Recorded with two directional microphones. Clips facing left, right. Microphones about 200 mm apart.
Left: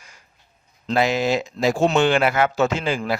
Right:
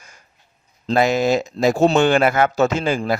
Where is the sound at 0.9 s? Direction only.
45° right (ahead or behind).